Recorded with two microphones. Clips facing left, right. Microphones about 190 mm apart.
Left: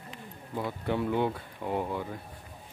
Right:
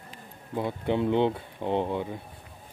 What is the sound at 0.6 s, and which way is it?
Speech, 20° right (ahead or behind).